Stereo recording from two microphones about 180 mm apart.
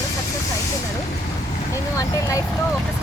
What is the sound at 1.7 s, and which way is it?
Speech, 20° left (ahead or behind).